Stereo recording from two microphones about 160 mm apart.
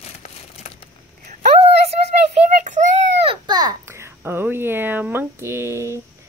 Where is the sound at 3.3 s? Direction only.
25° right (ahead or behind).